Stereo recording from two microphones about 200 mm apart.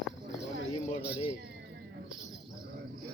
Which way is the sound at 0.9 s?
30° left (ahead or behind).